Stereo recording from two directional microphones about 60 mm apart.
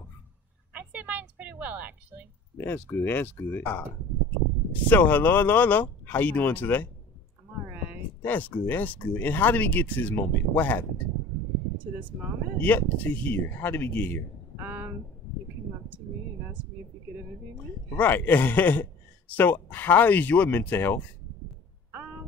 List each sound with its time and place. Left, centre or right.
0.7 s a sound: right
2.5 s speech: left
4.8 s speech: left
8.2 s speech: left
12.5 s speech: left
14.6 s a sound: right
17.9 s speech: left